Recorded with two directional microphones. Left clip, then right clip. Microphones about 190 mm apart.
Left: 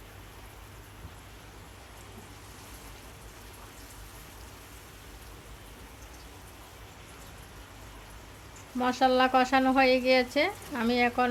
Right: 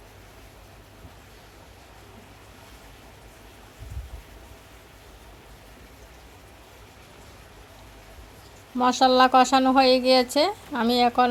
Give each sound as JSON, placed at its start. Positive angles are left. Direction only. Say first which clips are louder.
{"t": 8.8, "sound": "speech", "louder": "right 6 dB", "side_deg": -30}